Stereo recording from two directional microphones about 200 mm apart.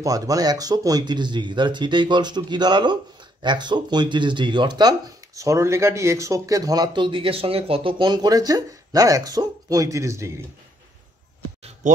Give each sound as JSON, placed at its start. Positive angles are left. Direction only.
{"t": 0.0, "sound": "speech", "side_deg": -15}